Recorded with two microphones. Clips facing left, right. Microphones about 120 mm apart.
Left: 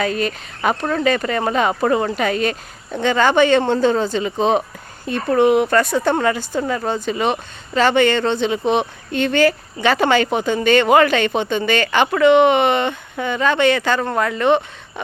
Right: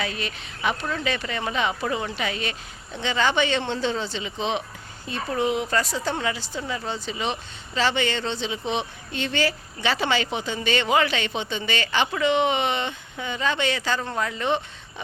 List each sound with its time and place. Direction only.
0.0 s speech: 45° left (ahead or behind)
5.0 s a woman's voice: 60° left (ahead or behind)